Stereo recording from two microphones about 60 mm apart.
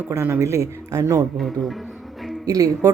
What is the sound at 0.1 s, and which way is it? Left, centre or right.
Speech, right.